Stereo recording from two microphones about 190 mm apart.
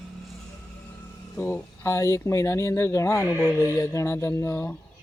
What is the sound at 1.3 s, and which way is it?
Speech, 15° left (ahead or behind).